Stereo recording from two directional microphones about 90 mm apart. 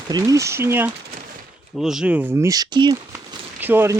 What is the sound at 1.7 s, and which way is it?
Speech, 5° right (ahead or behind).